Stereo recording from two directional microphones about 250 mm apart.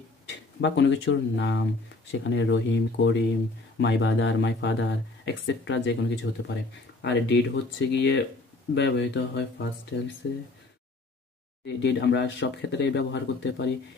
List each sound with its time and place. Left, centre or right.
0.6 s speech: left
11.6 s speech: left